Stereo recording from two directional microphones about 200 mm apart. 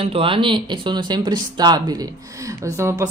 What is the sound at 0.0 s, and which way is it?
Speech, 25° right (ahead or behind).